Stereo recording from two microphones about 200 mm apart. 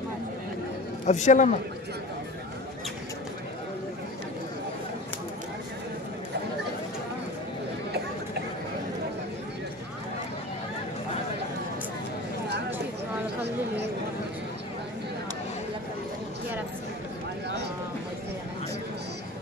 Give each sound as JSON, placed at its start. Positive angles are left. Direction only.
{"t": 1.0, "sound": "a man's voice", "side_deg": 35}